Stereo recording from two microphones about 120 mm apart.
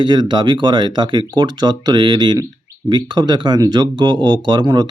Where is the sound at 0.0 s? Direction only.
40° right (ahead or behind).